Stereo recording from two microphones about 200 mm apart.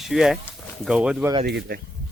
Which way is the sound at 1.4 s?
50° right (ahead or behind).